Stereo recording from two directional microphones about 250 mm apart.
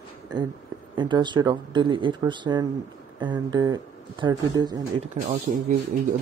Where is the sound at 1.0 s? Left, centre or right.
Centre.